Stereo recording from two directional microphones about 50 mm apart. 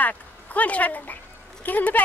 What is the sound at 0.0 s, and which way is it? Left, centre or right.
Speech, left.